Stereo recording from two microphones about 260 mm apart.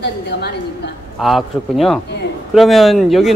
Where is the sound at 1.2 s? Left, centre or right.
Centre.